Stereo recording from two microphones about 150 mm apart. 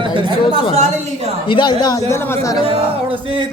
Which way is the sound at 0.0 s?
35° right (ahead or behind).